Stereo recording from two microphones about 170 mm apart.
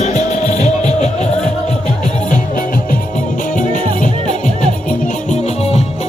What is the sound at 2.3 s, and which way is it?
Music, 50° left (ahead or behind).